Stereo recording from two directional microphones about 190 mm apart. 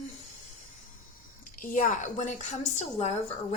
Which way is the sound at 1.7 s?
40° left (ahead or behind).